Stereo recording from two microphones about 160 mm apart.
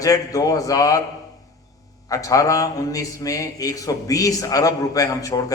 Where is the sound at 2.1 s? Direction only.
20° left (ahead or behind).